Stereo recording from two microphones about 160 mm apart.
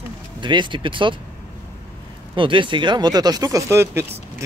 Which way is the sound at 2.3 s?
30° right (ahead or behind).